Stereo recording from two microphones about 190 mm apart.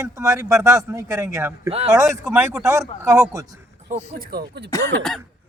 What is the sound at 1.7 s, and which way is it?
Speech, 30° right (ahead or behind).